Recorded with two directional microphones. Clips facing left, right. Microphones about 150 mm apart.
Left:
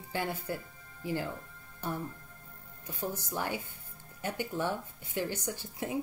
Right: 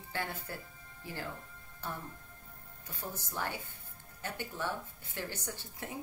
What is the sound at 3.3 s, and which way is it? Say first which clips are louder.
Speech: left 4 dB; 15° left (ahead or behind).